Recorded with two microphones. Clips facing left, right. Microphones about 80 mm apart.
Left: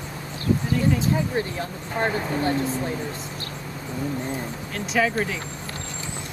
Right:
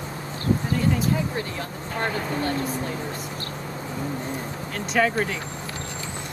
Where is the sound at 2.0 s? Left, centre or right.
Left.